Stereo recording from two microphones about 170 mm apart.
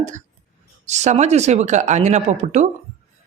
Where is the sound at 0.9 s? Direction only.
40° right (ahead or behind).